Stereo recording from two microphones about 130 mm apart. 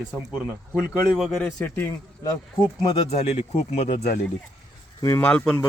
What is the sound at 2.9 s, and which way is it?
Speech, 55° left (ahead or behind).